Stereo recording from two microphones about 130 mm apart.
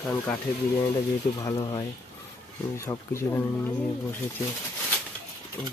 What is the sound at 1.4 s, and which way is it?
Speech, 30° left (ahead or behind).